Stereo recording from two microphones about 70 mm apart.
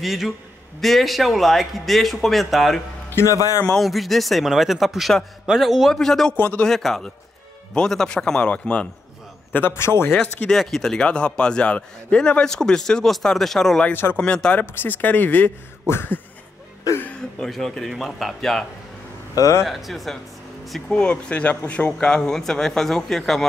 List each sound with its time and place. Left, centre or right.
0.0 s speech: centre
3.2 s a man's voice: left
3.8 s speech: centre
6.3 s speech: left
6.6 s a man's voice: centre
9.5 s a man's voice: left
10.1 s a man's voice: centre
13.9 s a man's voice: left
14.2 s speech: centre
14.7 s a man's voice: left
17.4 s speech: centre
19.3 s a man's voice: left
19.6 s speech: centre
20.9 s a man's voice: centre